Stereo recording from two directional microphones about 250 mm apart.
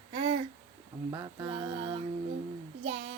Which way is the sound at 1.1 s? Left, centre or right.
Centre.